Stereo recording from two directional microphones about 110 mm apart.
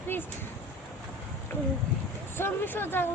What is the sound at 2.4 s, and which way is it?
Speech, 20° left (ahead or behind).